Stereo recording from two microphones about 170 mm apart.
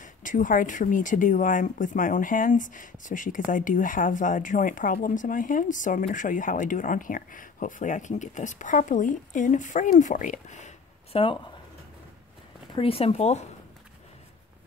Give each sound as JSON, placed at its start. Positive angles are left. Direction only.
{"t": 0.0, "sound": "speech", "side_deg": 50}
{"t": 11.1, "sound": "speech", "side_deg": 35}
{"t": 12.7, "sound": "speech", "side_deg": 35}